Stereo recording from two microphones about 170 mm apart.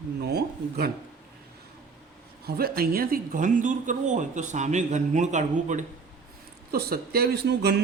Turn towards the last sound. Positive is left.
turn(degrees=-80)